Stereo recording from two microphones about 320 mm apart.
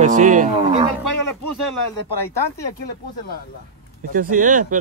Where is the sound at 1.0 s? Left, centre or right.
Left.